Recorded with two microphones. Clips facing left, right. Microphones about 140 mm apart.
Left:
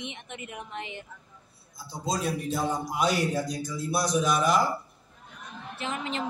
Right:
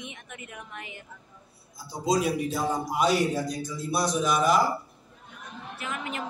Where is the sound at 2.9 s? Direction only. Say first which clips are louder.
Right 3 dB; centre (ahead or behind).